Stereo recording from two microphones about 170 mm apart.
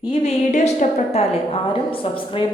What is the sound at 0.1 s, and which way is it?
A woman's voice, 40° left (ahead or behind).